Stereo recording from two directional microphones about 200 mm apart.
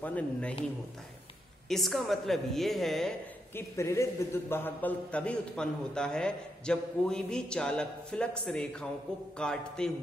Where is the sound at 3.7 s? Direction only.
15° left (ahead or behind).